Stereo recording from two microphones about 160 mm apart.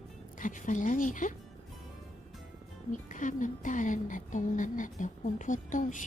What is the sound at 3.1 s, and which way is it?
Speech, 50° left (ahead or behind).